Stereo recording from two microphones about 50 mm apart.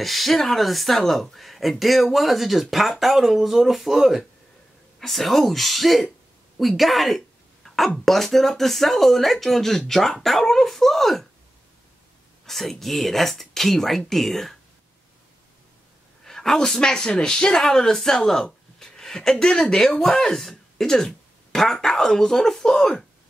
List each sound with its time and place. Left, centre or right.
0.0 s speech: centre
12.4 s speech: centre
16.3 s speech: centre